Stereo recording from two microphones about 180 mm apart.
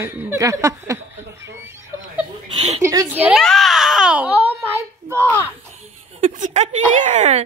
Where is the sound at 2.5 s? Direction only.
35° right (ahead or behind).